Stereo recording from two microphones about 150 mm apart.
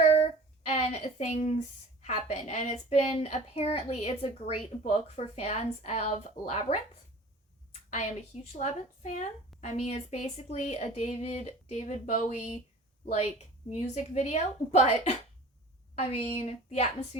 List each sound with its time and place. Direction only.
0.6 s a woman's voice: 45° left (ahead or behind)